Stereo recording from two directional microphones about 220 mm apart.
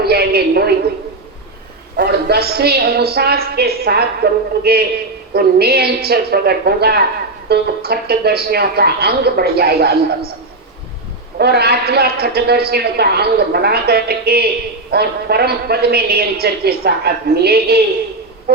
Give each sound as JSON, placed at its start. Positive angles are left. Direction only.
{"t": 0.0, "sound": "a sound", "side_deg": -45}
{"t": 2.0, "sound": "a man's voice", "side_deg": -45}
{"t": 11.3, "sound": "a man's voice", "side_deg": -45}